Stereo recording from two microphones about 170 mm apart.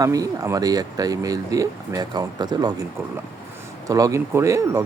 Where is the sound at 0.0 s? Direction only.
20° right (ahead or behind).